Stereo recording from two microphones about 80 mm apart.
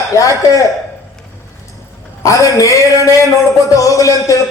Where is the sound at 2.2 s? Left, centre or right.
Left.